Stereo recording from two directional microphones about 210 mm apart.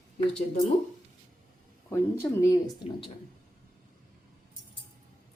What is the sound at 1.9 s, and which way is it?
Speech, 15° left (ahead or behind).